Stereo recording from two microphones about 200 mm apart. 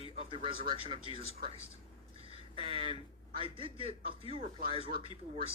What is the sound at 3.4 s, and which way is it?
Speech, 25° right (ahead or behind).